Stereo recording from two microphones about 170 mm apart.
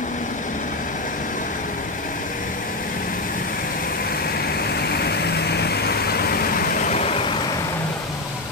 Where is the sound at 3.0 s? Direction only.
55° left (ahead or behind); by 7.3 s 40° left (ahead or behind).